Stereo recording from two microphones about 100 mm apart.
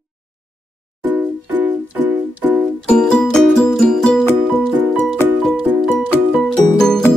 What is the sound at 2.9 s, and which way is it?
Music, 5° left (ahead or behind).